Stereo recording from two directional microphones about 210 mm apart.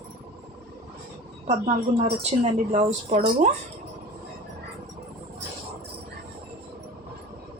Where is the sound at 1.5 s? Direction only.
30° right (ahead or behind).